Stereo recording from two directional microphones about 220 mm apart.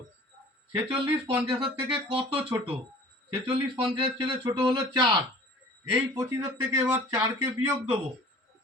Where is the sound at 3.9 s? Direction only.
25° right (ahead or behind).